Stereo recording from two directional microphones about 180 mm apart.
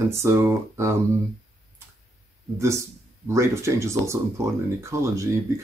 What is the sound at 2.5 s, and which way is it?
Speech, 15° right (ahead or behind).